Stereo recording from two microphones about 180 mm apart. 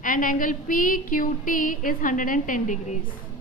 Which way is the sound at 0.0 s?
50° left (ahead or behind).